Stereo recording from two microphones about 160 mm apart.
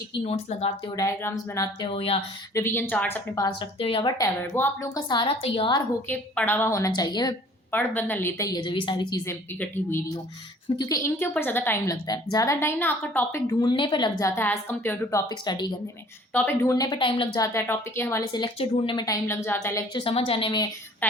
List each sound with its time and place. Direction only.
0.1 s speech: 40° left (ahead or behind)
0.9 s a woman's voice: 20° left (ahead or behind)
1.9 s speech: 35° left (ahead or behind)
2.6 s a woman's voice: 15° left (ahead or behind)
3.3 s speech: 30° left (ahead or behind)
4.2 s a woman's voice: 15° left (ahead or behind)
6.1 s a woman's voice: 15° left (ahead or behind)
7.7 s a woman's voice: 10° left (ahead or behind)
10.8 s a woman's voice: 20° left (ahead or behind)
14.3 s a woman's voice: 15° left (ahead or behind)
15.3 s a woman's voice: 25° left (ahead or behind)
16.3 s a woman's voice: 15° left (ahead or behind)
19.9 s speech: 35° left (ahead or behind)
21.0 s a woman's voice: 10° left (ahead or behind)